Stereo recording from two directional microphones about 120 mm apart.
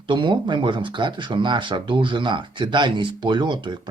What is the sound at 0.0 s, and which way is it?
Speech, 40° right (ahead or behind).